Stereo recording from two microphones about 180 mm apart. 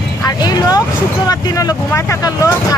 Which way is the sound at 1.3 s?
20° left (ahead or behind).